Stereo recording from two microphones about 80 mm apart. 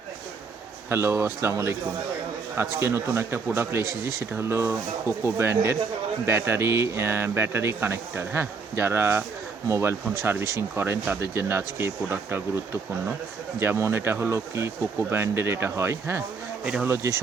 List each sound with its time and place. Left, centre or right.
0.9 s speech: right
10.8 s speech: right